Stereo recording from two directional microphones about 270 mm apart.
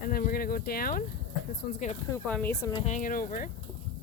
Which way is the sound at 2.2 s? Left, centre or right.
Centre.